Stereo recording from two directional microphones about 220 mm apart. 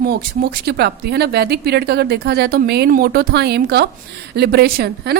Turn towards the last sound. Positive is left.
turn(degrees=-45)  # may be behind; listen again after turning